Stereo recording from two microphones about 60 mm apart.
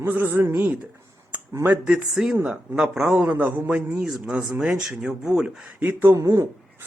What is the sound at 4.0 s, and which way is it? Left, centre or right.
Speech, centre.